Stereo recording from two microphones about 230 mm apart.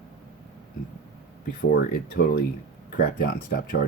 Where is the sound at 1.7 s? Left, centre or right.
Left.